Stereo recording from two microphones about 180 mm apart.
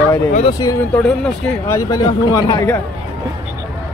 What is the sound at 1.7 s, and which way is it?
Speech, 20° left (ahead or behind).